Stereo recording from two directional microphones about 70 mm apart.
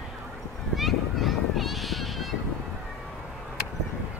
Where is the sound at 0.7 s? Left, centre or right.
Centre.